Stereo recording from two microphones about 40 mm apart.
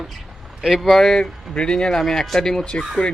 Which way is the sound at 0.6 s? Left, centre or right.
Centre.